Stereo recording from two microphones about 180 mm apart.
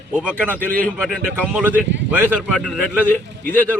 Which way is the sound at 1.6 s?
10° right (ahead or behind).